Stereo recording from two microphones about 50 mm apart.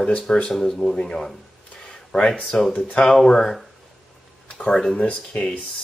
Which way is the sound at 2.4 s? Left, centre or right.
Centre.